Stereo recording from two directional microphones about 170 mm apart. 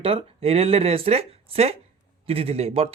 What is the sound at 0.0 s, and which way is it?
Speech, 35° right (ahead or behind).